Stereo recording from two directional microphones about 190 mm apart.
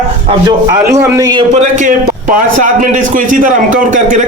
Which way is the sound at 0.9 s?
20° right (ahead or behind).